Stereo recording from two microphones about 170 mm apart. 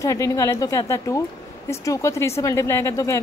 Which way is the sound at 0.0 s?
20° left (ahead or behind).